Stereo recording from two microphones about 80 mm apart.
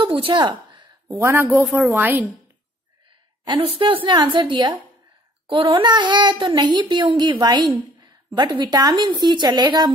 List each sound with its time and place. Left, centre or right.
0.0 s a sound: right
1.0 s speech: right
1.9 s a woman's voice: right
3.8 s a woman's voice: right
7.3 s a woman's voice: right
8.4 s a woman's voice: right